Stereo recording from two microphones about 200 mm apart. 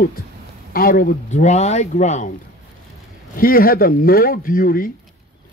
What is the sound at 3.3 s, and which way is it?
Speech, 45° left (ahead or behind).